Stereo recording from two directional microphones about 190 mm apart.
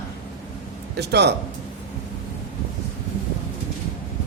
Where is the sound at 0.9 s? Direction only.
60° right (ahead or behind).